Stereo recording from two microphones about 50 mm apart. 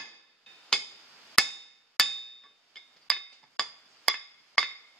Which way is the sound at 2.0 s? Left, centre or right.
Centre.